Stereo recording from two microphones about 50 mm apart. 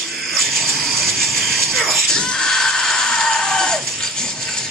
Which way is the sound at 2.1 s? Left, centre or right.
Centre.